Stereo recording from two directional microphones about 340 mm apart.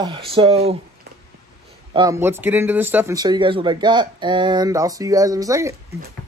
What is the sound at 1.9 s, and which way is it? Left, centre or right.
Speech, centre.